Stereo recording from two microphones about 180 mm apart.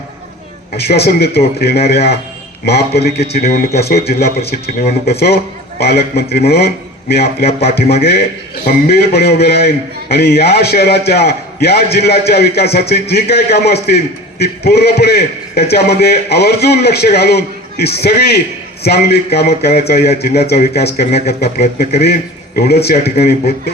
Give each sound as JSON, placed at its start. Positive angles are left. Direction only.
{"t": 0.8, "sound": "a man's voice", "side_deg": 60}